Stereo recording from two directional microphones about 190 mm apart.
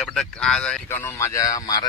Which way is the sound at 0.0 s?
5° left (ahead or behind).